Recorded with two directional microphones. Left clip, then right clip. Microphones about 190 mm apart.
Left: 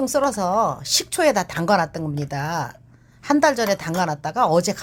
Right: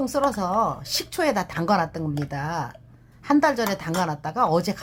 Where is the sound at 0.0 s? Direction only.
20° left (ahead or behind).